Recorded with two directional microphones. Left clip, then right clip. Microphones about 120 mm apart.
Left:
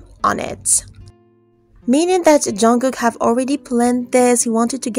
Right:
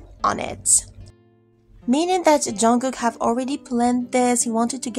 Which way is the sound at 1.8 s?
40° left (ahead or behind).